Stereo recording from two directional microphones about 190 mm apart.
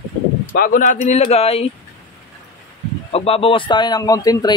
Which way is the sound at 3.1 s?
30° left (ahead or behind).